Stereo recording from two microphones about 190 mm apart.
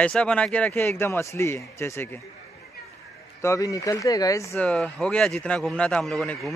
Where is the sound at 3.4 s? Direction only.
15° left (ahead or behind).